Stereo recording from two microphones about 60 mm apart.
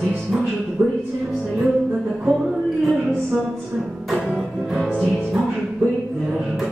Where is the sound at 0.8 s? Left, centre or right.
Right.